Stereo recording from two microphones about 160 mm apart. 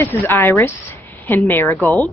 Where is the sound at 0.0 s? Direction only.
15° left (ahead or behind).